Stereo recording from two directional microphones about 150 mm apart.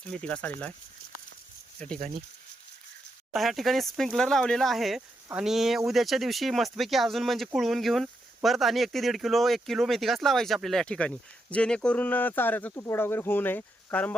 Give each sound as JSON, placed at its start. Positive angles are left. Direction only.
{"t": 0.0, "sound": "speech", "side_deg": 10}
{"t": 3.3, "sound": "speech", "side_deg": 0}